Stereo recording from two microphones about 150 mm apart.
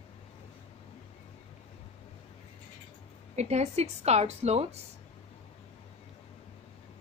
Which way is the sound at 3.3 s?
50° right (ahead or behind).